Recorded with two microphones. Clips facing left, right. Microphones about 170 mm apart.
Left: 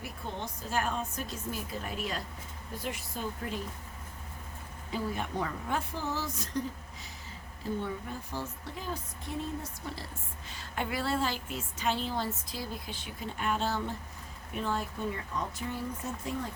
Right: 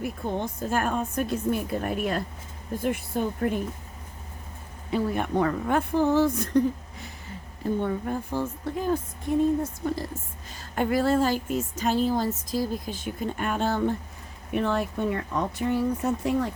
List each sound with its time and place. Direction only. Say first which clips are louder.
0.0 s speech: right 10 dB; 50° right (ahead or behind)
4.9 s speech: right 8 dB; 60° right (ahead or behind)
7.6 s a woman's voice: right 8 dB; 55° right (ahead or behind)
14.5 s speech: right 8 dB; 65° right (ahead or behind)